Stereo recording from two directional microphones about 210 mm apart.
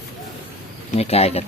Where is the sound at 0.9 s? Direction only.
30° left (ahead or behind).